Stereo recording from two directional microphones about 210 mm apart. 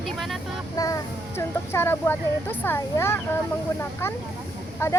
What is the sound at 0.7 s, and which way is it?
Child singing, 15° left (ahead or behind).